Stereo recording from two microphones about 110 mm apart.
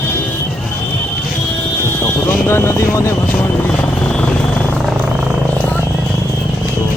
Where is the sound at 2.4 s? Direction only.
20° left (ahead or behind).